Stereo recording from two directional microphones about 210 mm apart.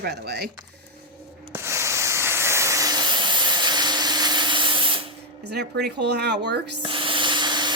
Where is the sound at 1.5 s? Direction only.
15° right (ahead or behind).